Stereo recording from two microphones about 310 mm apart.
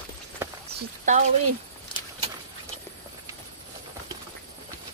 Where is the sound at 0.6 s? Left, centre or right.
Right.